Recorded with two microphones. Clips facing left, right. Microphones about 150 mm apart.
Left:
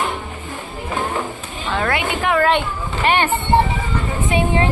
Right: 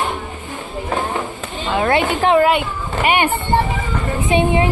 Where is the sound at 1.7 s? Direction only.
20° right (ahead or behind).